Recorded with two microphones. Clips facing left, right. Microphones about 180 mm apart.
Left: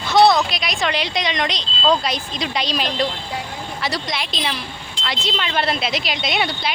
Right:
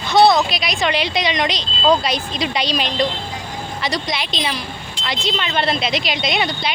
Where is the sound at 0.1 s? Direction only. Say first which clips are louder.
Right 1 dB; centre (ahead or behind).